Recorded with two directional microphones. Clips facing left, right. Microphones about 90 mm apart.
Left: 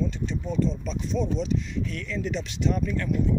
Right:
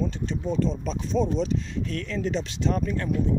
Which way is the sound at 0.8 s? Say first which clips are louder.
Right 3 dB; 35° right (ahead or behind).